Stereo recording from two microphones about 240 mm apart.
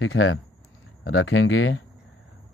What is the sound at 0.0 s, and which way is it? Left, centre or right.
Speech, left.